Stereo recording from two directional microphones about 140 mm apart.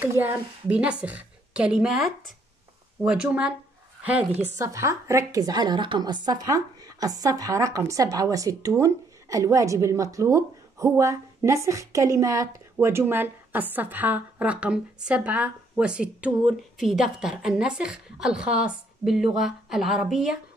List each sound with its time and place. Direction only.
0.0 s a woman's voice: 15° right (ahead or behind)
4.6 s a woman's voice: 20° right (ahead or behind); by 20.3 s 5° right (ahead or behind)